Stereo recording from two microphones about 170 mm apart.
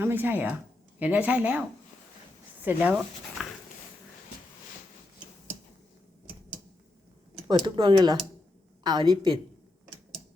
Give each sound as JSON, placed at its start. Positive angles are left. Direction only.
{"t": 0.0, "sound": "speech", "side_deg": -10}
{"t": 7.4, "sound": "speech", "side_deg": -25}